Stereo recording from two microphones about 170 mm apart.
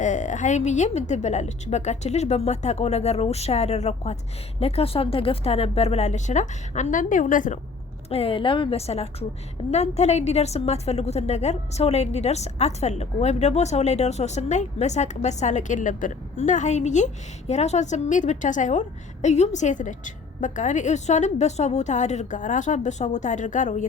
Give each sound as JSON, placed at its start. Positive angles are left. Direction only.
{"t": 0.0, "sound": "a woman's voice", "side_deg": 45}
{"t": 8.1, "sound": "a woman's voice", "side_deg": 35}